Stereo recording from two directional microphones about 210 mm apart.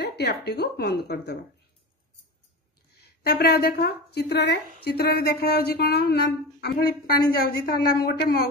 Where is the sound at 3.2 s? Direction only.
50° left (ahead or behind).